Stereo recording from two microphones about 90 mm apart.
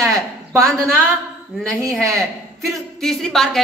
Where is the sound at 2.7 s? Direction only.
5° left (ahead or behind).